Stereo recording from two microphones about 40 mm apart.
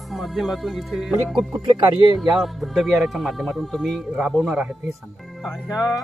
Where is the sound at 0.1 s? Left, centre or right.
Centre.